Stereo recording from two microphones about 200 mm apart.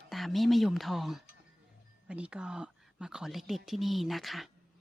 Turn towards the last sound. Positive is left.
turn(degrees=0)  # may be behind; listen again after turning